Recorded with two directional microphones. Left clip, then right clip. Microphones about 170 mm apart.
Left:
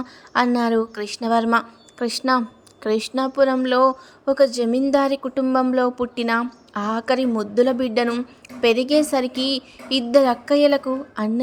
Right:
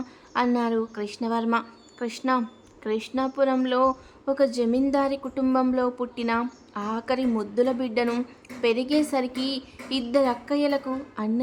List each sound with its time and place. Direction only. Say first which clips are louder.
0.3 s speech: left 5 dB; 25° left (ahead or behind)